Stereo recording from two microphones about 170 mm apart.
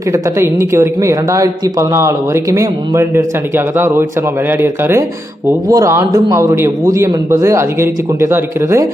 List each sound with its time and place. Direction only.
0.1 s speech: 15° right (ahead or behind)